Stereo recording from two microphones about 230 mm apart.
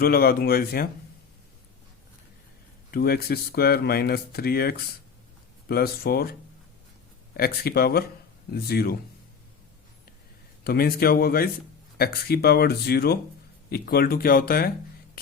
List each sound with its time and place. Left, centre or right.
0.0 s speech: left
2.9 s speech: left
7.3 s speech: left
10.6 s speech: left